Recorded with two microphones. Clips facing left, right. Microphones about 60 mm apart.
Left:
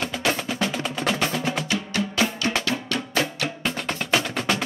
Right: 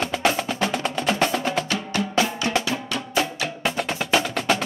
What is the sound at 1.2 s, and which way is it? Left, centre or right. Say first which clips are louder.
Music: right 3 dB; right.